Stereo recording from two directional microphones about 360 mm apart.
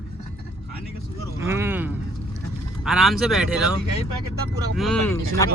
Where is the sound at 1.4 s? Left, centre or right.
Centre.